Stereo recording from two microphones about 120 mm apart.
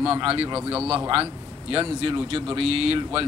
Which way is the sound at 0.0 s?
50° right (ahead or behind).